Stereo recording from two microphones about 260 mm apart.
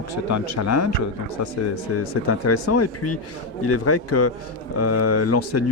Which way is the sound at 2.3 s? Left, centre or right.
Left.